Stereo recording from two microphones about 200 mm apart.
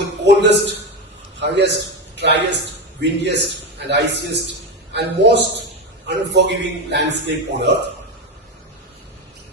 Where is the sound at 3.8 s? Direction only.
60° right (ahead or behind).